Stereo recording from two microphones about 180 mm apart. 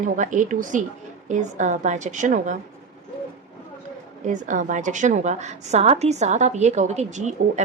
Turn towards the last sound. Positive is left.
turn(degrees=-40)  # may be behind; listen again after turning